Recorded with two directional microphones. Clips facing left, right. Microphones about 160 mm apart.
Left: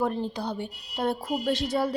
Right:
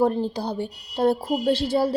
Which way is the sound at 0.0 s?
35° right (ahead or behind).